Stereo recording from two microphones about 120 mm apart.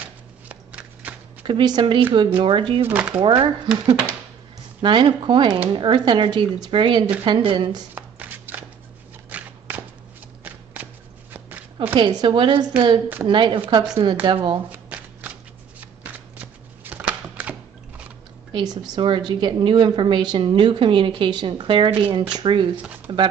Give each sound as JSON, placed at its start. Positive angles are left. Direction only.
{"t": 0.5, "sound": "a sound", "side_deg": -10}
{"t": 1.4, "sound": "speech", "side_deg": -40}
{"t": 2.9, "sound": "speech", "side_deg": -10}
{"t": 3.2, "sound": "speech", "side_deg": -40}
{"t": 7.9, "sound": "shuffling cards", "side_deg": -15}
{"t": 9.3, "sound": "a sound", "side_deg": -15}
{"t": 10.4, "sound": "shuffling cards", "side_deg": -15}
{"t": 11.3, "sound": "a sound", "side_deg": -15}
{"t": 11.9, "sound": "speech", "side_deg": -40}
{"t": 14.7, "sound": "shuffling cards", "side_deg": -15}
{"t": 18.5, "sound": "speech", "side_deg": -35}
{"t": 22.8, "sound": "a sound", "side_deg": -10}